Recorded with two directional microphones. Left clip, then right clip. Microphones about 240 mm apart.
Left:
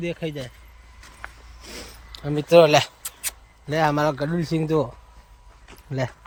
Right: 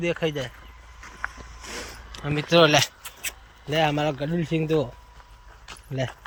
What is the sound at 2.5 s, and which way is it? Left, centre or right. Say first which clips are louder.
Speech: left 4 dB; left.